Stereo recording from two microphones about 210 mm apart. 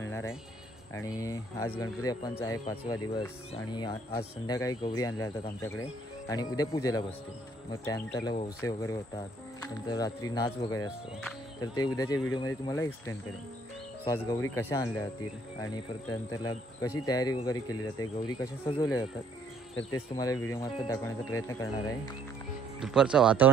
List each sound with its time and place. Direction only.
0.9 s speech: 15° left (ahead or behind)
20.2 s speech: 15° left (ahead or behind)
22.8 s speech: centre (ahead or behind)